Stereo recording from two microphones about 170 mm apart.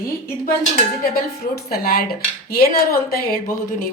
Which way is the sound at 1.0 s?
60° left (ahead or behind).